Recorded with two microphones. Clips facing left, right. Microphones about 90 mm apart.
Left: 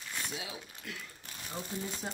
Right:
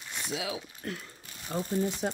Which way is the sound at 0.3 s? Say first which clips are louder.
Right 8 dB; 90° right.